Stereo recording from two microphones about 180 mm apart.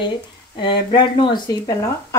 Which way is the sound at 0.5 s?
25° left (ahead or behind).